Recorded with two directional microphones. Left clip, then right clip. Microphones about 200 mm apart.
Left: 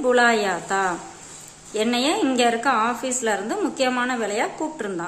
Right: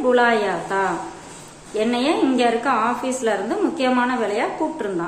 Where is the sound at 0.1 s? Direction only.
25° left (ahead or behind).